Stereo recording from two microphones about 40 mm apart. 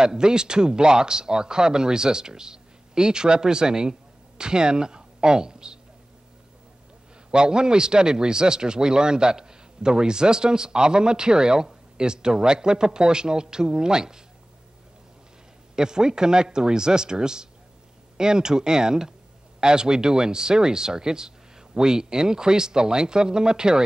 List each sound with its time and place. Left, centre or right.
0.0 s a man's voice: centre
7.2 s a man's voice: centre
15.7 s a man's voice: centre